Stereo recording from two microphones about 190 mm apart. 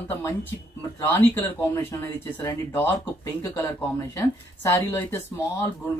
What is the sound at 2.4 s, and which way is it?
Speech, 15° left (ahead or behind).